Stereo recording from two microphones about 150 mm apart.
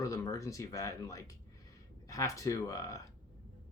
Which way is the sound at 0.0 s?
20° left (ahead or behind).